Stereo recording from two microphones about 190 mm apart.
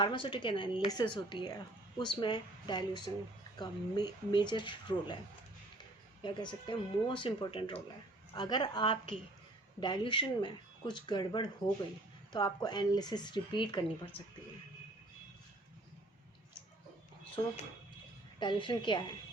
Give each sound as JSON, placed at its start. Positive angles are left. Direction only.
{"t": 0.0, "sound": "speech", "side_deg": 25}
{"t": 6.2, "sound": "speech", "side_deg": 25}
{"t": 18.3, "sound": "speech", "side_deg": 25}